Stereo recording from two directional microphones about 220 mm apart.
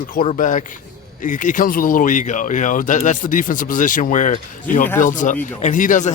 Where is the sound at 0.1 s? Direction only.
40° left (ahead or behind).